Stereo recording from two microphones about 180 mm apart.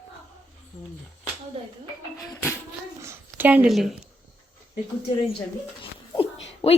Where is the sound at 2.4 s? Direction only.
10° left (ahead or behind).